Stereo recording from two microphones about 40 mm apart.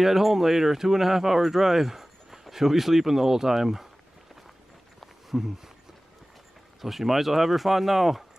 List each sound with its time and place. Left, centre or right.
0.0 s speech: centre
5.0 s a sound: centre
6.8 s speech: centre